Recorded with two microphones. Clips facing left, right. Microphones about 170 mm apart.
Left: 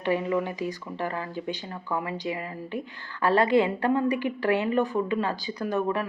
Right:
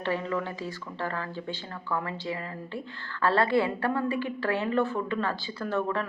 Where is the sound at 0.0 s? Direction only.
15° left (ahead or behind).